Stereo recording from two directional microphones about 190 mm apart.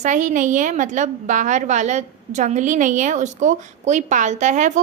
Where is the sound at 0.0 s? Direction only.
40° right (ahead or behind).